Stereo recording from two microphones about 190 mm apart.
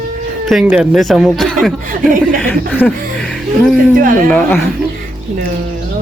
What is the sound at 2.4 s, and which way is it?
Chuckle, 10° left (ahead or behind).